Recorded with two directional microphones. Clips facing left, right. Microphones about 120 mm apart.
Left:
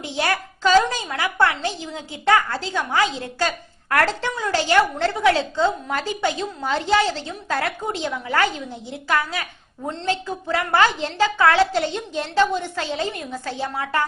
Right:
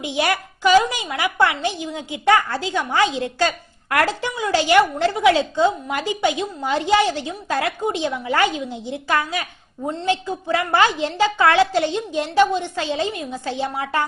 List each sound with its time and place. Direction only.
0.0 s a woman's voice: 15° right (ahead or behind)
3.9 s a woman's voice: 15° right (ahead or behind)